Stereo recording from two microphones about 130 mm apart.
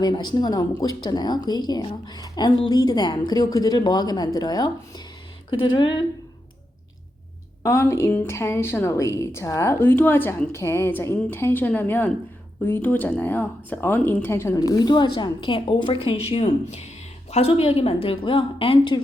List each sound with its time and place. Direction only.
0.0 s speech: 35° left (ahead or behind)
7.6 s a woman's voice: 20° left (ahead or behind); by 18.9 s 45° left (ahead or behind)